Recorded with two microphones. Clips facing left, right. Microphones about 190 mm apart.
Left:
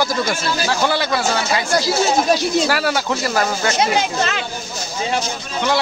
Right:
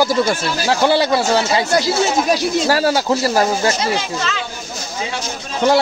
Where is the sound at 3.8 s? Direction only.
60° left (ahead or behind).